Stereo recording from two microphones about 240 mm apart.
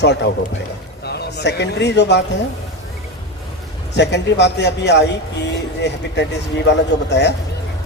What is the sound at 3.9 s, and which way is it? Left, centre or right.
A man's voice, left.